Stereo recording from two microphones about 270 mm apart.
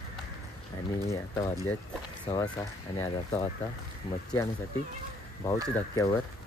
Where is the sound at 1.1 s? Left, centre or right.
Centre.